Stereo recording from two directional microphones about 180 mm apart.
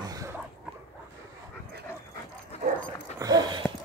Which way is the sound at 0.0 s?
20° right (ahead or behind).